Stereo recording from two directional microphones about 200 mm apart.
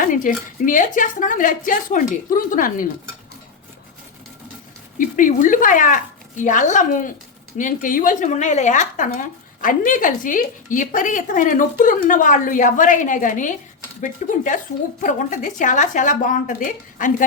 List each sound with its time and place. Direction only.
0.0 s speech: 40° left (ahead or behind)
4.9 s speech: 40° left (ahead or behind)